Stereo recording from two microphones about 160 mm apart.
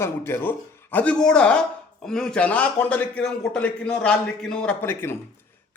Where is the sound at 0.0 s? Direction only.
15° left (ahead or behind).